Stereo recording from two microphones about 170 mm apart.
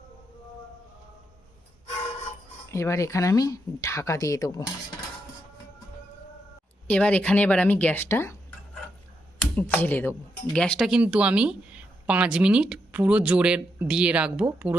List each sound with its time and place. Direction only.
2.6 s speech: 15° left (ahead or behind)
6.8 s speech: 5° left (ahead or behind)